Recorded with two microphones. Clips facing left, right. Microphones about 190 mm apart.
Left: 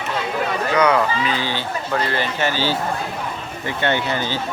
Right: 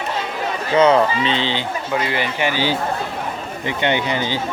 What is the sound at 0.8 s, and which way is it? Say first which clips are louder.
Speech: right 4 dB; 25° right (ahead or behind).